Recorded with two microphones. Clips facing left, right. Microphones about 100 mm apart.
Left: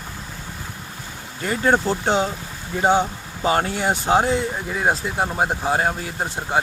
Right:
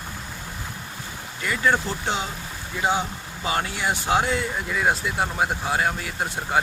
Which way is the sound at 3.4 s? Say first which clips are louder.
Left 5 dB; 40° left (ahead or behind).